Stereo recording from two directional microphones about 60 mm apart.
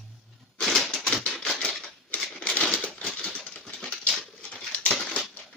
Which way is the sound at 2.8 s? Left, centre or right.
Centre.